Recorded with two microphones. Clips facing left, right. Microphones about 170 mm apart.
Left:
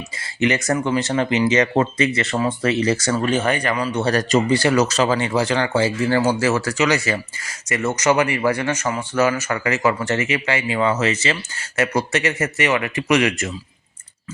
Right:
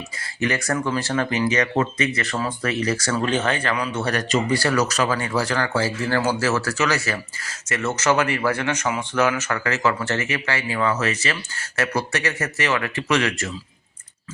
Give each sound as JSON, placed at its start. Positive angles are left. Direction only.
{"t": 0.4, "sound": "speech", "side_deg": 20}
{"t": 3.2, "sound": "speech", "side_deg": 10}
{"t": 4.0, "sound": "speech", "side_deg": 35}
{"t": 4.4, "sound": "speech", "side_deg": 20}